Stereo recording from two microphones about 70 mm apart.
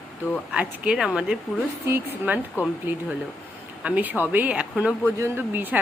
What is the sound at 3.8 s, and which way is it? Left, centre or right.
Speech, right.